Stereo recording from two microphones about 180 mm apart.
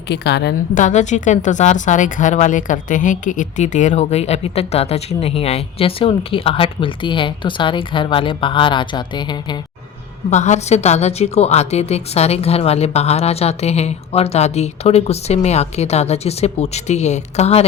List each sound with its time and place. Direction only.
0.1 s a woman's voice: 70° left (ahead or behind)
0.7 s a woman's voice: 45° left (ahead or behind); by 9.6 s 25° left (ahead or behind)
10.2 s a woman's voice: 40° left (ahead or behind)